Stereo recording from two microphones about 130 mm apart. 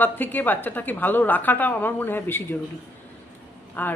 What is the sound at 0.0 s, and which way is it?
A woman's voice, 15° left (ahead or behind).